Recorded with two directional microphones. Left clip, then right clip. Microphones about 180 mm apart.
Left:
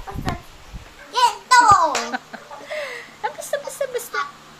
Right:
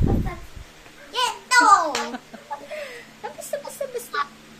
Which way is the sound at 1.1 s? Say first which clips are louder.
Left 7 dB; 20° right (ahead or behind).